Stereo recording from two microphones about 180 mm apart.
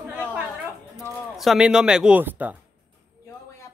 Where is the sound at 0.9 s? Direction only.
Centre (ahead or behind).